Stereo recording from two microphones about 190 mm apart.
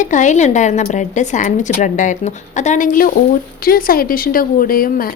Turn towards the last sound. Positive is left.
turn(degrees=50)  # may be behind; listen again after turning